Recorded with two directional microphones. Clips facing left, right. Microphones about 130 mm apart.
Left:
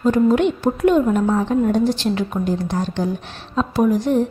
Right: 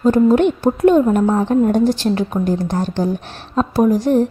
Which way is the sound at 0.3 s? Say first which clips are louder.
Right 3 dB; 40° right (ahead or behind).